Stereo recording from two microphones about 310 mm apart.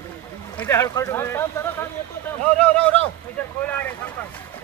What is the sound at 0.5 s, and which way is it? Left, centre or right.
Speech, centre.